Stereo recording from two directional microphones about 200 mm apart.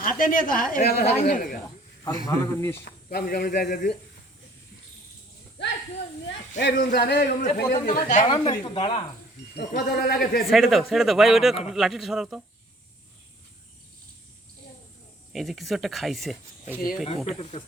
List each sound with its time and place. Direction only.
0.0 s a woman's voice: 45° left (ahead or behind)
2.0 s a man's voice: 15° left (ahead or behind)
3.1 s a woman's voice: 50° left (ahead or behind)
6.6 s a woman's voice: 60° left (ahead or behind)
8.2 s speech: 25° left (ahead or behind)
9.6 s a woman's voice: 55° left (ahead or behind)
10.5 s speech: centre (ahead or behind)
15.3 s speech: centre (ahead or behind)
17.2 s speech: 35° left (ahead or behind)